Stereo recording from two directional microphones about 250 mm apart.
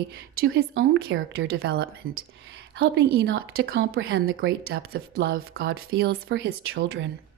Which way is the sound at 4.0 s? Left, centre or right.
Right.